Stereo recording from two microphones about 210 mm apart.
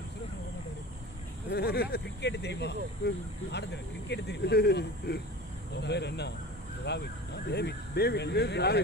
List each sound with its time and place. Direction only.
1.5 s speech: 50° left (ahead or behind)